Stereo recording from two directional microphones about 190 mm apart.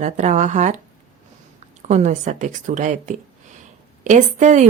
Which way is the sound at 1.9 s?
40° right (ahead or behind).